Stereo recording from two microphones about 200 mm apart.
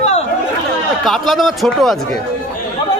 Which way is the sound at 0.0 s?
35° left (ahead or behind).